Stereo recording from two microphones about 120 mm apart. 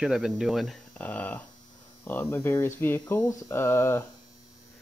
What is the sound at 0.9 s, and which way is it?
Speech, 15° left (ahead or behind).